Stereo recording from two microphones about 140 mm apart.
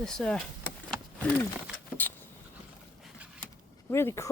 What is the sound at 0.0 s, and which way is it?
Speech, 5° left (ahead or behind).